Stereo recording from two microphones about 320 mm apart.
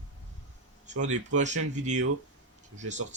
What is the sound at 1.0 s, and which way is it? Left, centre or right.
A man's voice, right.